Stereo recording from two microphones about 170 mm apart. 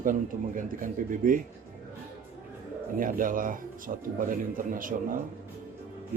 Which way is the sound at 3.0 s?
55° right (ahead or behind).